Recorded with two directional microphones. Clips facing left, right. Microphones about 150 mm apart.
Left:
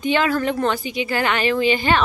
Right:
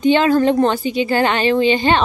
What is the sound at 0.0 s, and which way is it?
A woman's voice, 25° right (ahead or behind).